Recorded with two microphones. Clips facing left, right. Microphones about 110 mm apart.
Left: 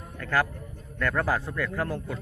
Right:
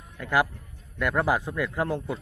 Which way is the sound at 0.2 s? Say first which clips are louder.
Right 2 dB; 15° right (ahead or behind).